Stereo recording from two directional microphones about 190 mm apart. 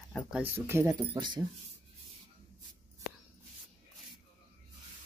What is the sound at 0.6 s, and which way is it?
Speech, 10° right (ahead or behind).